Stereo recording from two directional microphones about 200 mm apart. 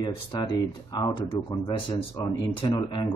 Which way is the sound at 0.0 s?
20° left (ahead or behind).